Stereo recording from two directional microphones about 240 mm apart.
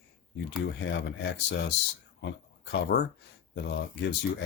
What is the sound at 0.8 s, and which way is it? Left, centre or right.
Speech, left.